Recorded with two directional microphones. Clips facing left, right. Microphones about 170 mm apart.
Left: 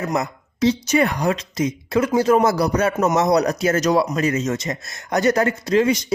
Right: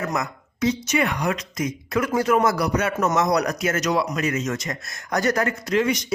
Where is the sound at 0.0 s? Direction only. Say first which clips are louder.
Left 3 dB; 25° left (ahead or behind).